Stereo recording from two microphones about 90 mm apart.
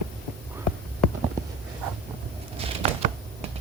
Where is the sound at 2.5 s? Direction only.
90° right.